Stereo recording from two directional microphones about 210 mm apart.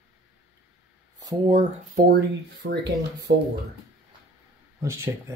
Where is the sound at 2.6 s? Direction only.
65° right (ahead or behind).